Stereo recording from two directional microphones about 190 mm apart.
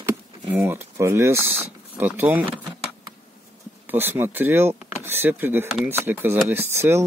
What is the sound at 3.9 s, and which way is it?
Speech, 10° right (ahead or behind).